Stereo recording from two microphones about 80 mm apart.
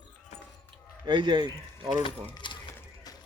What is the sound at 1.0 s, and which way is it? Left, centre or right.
Speech, right.